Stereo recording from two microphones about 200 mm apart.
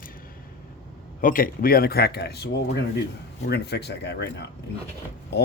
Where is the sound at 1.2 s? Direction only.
45° left (ahead or behind).